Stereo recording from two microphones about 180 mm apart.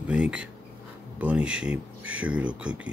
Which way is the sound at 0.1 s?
5° right (ahead or behind).